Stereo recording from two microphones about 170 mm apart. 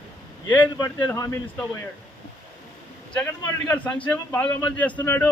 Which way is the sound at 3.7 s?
10° left (ahead or behind).